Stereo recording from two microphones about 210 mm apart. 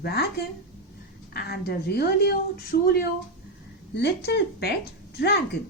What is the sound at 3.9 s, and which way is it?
Speech, 55° left (ahead or behind).